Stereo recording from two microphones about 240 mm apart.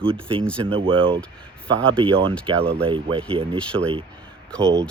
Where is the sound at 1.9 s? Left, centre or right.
Right.